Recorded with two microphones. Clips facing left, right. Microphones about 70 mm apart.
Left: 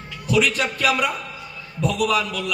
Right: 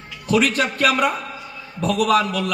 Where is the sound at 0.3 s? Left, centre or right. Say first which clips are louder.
Right 2 dB; right.